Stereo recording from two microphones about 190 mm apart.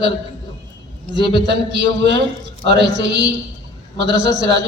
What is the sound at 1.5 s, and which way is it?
A man's voice, 65° right (ahead or behind).